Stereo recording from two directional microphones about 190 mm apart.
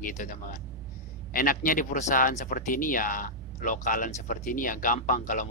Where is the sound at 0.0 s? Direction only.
40° left (ahead or behind).